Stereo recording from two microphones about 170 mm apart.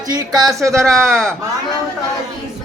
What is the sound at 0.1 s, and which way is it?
Speech, 20° right (ahead or behind).